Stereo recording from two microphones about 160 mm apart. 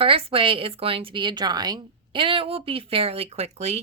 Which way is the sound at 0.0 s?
35° right (ahead or behind).